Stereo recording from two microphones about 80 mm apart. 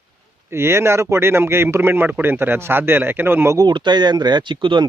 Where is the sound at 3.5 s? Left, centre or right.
Right.